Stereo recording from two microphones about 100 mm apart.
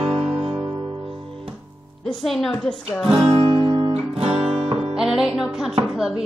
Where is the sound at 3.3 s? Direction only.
60° right (ahead or behind).